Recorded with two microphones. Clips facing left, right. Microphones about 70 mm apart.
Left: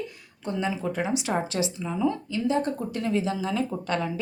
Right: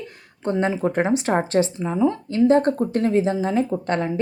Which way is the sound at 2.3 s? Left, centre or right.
Right.